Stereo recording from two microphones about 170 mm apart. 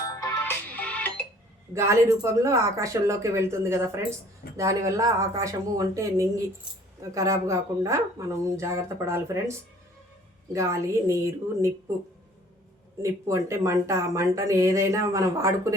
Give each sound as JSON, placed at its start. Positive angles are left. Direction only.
{"t": 0.1, "sound": "music", "side_deg": 15}
{"t": 1.7, "sound": "speech", "side_deg": -15}
{"t": 13.0, "sound": "speech", "side_deg": -15}